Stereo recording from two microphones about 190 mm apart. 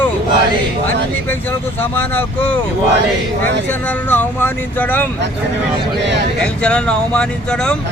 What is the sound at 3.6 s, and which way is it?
Speech, 10° left (ahead or behind).